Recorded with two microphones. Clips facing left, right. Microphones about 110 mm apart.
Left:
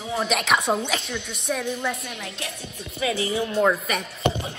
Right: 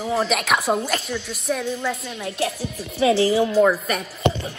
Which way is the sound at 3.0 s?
30° right (ahead or behind).